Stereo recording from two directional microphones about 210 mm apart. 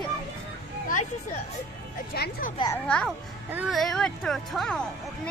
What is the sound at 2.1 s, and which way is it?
Speech, 50° left (ahead or behind).